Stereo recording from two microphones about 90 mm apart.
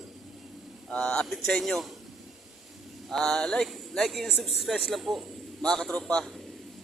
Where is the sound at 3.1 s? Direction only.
5° left (ahead or behind).